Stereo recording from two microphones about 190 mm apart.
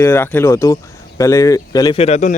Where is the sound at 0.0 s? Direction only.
10° left (ahead or behind).